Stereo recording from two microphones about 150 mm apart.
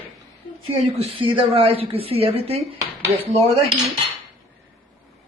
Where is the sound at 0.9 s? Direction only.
35° right (ahead or behind).